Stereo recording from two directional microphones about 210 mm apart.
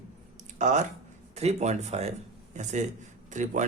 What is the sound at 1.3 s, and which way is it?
A man's voice, 30° right (ahead or behind).